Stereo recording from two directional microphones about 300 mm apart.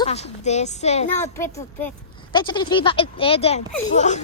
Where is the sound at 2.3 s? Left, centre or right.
Centre.